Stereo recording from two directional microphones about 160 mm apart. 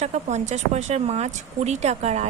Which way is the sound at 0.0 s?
45° right (ahead or behind).